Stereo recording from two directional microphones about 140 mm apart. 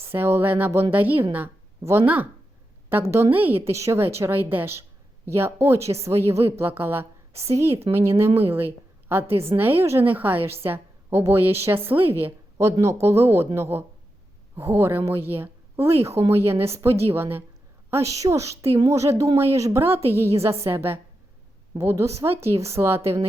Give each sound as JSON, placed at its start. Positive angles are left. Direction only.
{"t": 0.0, "sound": "a woman's voice", "side_deg": -15}